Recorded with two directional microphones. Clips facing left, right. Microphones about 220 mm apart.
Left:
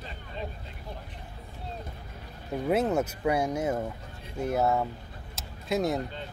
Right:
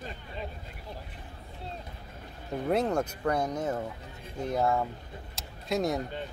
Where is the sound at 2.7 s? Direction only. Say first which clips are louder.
Left 2 dB; 5° left (ahead or behind).